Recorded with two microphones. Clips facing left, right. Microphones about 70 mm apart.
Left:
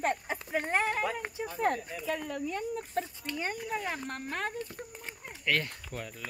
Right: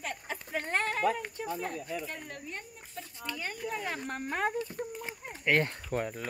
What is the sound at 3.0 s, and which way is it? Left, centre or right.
Speech, left.